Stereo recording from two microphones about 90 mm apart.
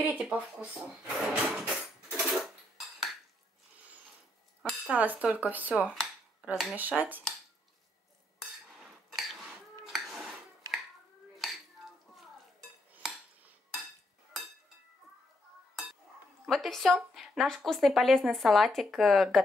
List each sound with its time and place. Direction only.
0.0 s speech: 15° right (ahead or behind)
4.8 s cutlery: 15° right (ahead or behind)
8.4 s cutlery: 5° right (ahead or behind)
9.8 s a sound: centre (ahead or behind)
11.4 s cutlery: centre (ahead or behind)
15.7 s dishes: 5° right (ahead or behind)
16.4 s speech: centre (ahead or behind)